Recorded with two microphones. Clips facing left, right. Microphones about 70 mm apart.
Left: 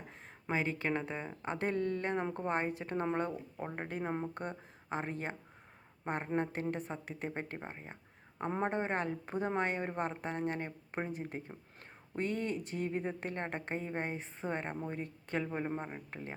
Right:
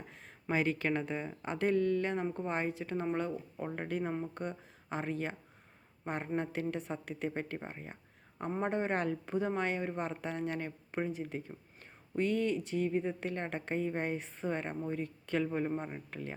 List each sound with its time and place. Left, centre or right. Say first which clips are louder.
0.4 s speech: right 2 dB; left
3.6 s speech: right 3 dB; centre
4.1 s speech: even; left
7.6 s speech: right 1 dB; centre
8.6 s speech: right 2 dB; left
9.3 s speech: even; left
15.4 s speech: right 3 dB; centre